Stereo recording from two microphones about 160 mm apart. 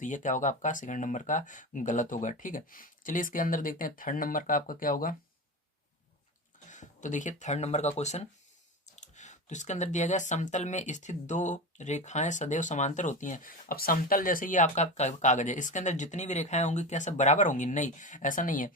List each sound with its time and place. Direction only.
0.0 s speech: 50° left (ahead or behind)
6.7 s speech: 50° left (ahead or behind)